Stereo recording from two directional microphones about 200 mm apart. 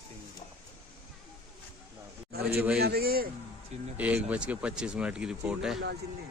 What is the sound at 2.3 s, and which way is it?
A man's voice, 50° right (ahead or behind).